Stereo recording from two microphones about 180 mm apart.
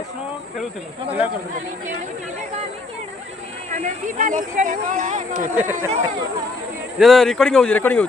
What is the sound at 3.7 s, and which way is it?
Speech, 45° right (ahead or behind).